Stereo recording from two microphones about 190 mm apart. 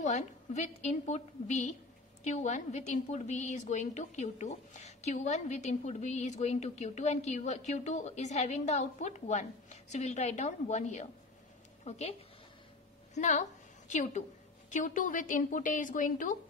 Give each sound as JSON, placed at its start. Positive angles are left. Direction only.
{"t": 0.0, "sound": "a woman's voice", "side_deg": 40}